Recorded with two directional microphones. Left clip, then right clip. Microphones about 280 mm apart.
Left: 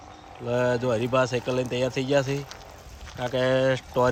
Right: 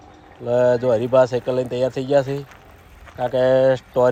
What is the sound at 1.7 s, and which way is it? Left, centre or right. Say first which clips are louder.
Speech: right 5 dB; left.